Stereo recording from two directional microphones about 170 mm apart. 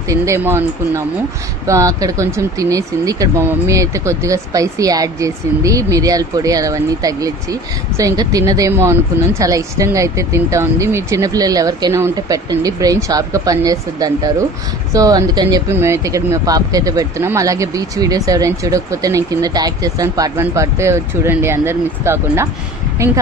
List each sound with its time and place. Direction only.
0.1 s speech: 20° right (ahead or behind)